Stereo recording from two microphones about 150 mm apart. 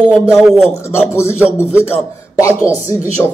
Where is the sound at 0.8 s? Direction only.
15° left (ahead or behind).